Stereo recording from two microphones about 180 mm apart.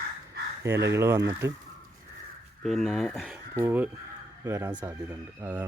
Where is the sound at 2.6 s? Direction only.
Centre (ahead or behind).